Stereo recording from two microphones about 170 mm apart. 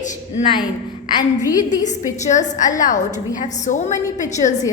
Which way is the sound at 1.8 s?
45° left (ahead or behind).